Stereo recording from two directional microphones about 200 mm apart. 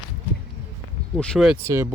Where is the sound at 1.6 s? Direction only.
15° right (ahead or behind).